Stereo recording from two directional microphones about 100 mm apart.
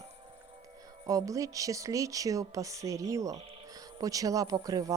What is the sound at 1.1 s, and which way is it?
Speech, 35° right (ahead or behind).